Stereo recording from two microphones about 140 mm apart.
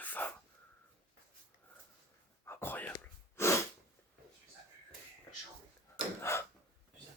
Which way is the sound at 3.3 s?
20° left (ahead or behind).